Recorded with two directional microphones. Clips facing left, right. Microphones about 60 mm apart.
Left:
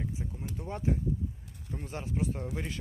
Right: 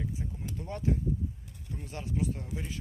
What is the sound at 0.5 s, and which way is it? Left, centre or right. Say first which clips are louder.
Speech: even; centre.